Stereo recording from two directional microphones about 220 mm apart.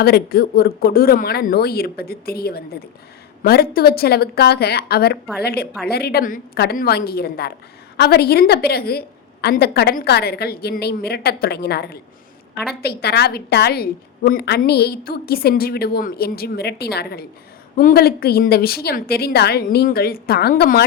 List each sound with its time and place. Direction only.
0.0 s a woman's voice: 45° left (ahead or behind)